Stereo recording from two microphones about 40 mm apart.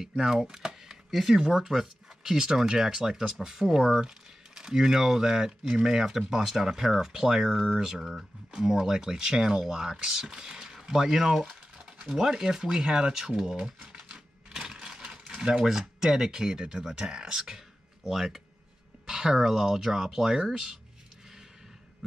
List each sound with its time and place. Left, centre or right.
0.2 s speech: centre
11.8 s mechanisms: right
12.2 s speech: centre
14.5 s typewriter: centre
15.2 s speech: centre
18.1 s speech: centre